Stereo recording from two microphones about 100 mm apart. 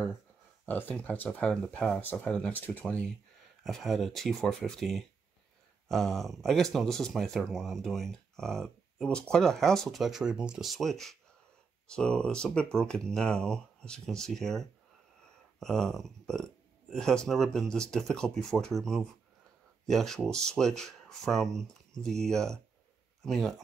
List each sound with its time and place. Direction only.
0.7 s speech: 20° left (ahead or behind)
3.6 s speech: centre (ahead or behind)